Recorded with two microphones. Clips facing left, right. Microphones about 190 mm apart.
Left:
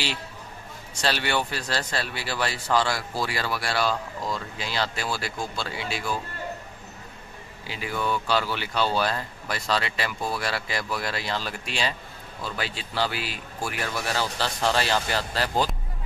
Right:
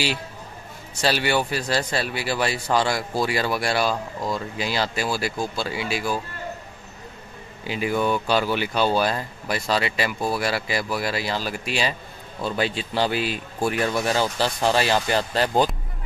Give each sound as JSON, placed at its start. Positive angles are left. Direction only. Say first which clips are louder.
{"t": 1.0, "sound": "a man's voice", "louder": "right 4 dB", "side_deg": -10}
{"t": 7.6, "sound": "a man's voice", "louder": "right 6 dB", "side_deg": -15}
{"t": 12.4, "sound": "a man's voice", "louder": "right 8 dB", "side_deg": -25}